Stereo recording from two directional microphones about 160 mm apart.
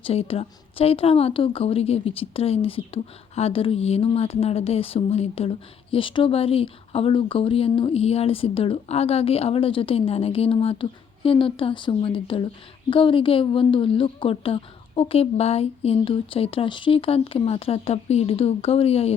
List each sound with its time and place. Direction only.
0.0 s a woman's voice: 40° left (ahead or behind)